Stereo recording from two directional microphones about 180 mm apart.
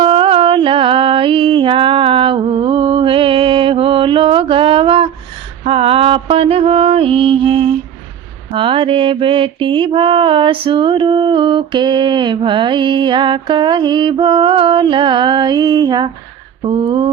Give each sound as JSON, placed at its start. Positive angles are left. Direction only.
{"t": 0.0, "sound": "music", "side_deg": -30}
{"t": 8.5, "sound": "mantra", "side_deg": -30}